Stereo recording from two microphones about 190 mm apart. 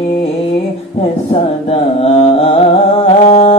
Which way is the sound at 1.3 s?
30° left (ahead or behind).